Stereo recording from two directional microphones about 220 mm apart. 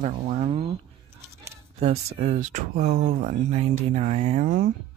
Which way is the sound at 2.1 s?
30° right (ahead or behind).